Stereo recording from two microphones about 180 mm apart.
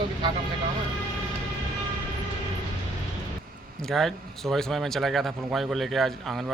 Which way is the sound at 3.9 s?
Centre (ahead or behind).